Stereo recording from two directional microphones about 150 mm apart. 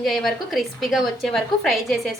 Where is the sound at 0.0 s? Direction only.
Centre (ahead or behind).